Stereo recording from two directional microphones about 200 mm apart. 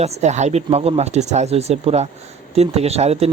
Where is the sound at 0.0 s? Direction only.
35° right (ahead or behind).